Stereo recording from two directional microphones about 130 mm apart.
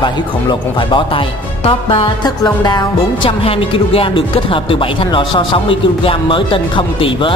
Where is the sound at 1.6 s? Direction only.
45° left (ahead or behind).